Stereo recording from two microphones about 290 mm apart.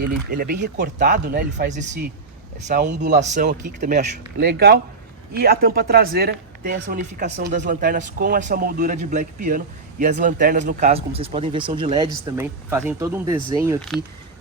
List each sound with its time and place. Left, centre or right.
0.3 s a man's voice: right; by 13.7 s centre